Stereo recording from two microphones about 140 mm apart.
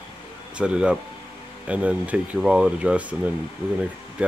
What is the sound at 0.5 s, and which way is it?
Speech, 5° right (ahead or behind).